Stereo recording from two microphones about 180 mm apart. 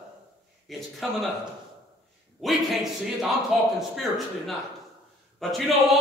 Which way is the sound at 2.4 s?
Centre (ahead or behind).